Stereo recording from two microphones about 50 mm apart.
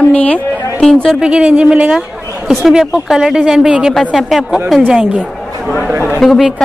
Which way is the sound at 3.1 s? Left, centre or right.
Centre.